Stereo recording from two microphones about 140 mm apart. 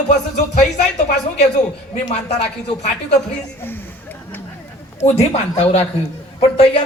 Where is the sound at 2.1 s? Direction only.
50° left (ahead or behind).